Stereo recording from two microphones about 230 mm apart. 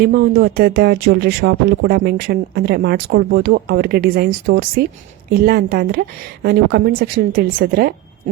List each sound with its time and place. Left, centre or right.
0.0 s a woman's voice: right